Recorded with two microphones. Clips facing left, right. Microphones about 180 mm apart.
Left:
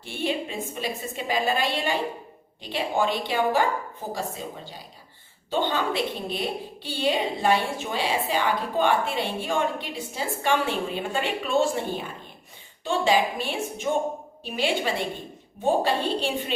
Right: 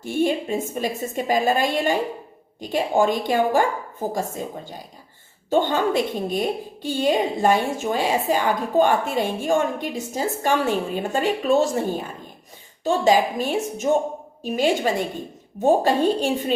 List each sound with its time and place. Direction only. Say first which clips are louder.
0.0 s a woman's voice: right 7 dB; 45° right (ahead or behind)